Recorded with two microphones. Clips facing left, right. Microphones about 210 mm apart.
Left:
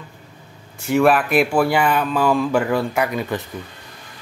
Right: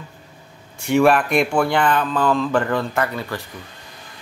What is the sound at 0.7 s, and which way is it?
Speech, centre (ahead or behind).